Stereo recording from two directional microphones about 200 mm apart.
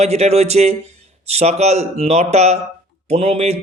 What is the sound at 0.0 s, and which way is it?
Speech, 30° right (ahead or behind).